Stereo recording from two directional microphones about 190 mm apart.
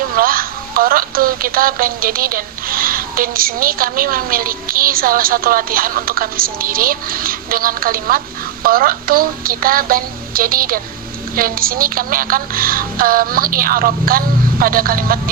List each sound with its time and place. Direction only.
0.1 s a woman's voice: 50° right (ahead or behind)